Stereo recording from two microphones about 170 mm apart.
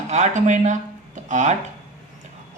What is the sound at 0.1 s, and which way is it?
Speech, 45° right (ahead or behind).